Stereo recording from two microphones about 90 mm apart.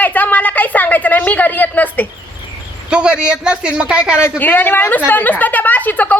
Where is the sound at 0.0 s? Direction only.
20° left (ahead or behind).